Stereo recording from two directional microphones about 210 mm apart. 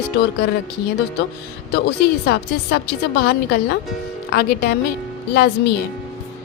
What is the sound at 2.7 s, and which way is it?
Speech, 50° left (ahead or behind).